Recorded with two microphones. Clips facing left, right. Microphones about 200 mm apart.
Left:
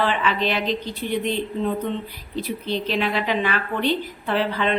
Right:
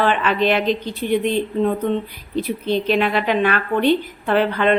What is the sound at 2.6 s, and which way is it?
A woman's voice, 55° right (ahead or behind).